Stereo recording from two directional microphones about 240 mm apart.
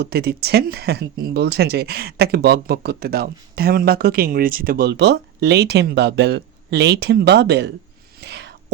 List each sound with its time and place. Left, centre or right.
0.0 s speech: right
8.2 s whispering: right